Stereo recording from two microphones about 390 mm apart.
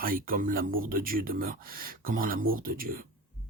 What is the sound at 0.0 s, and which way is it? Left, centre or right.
Speech, right.